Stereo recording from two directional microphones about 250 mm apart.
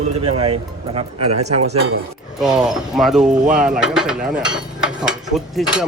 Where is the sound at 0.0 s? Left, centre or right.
Right.